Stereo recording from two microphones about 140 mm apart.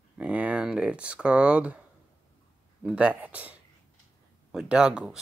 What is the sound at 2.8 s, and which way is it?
A man's voice, 10° right (ahead or behind).